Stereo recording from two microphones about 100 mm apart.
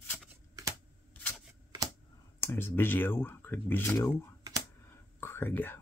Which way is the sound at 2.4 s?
25° left (ahead or behind).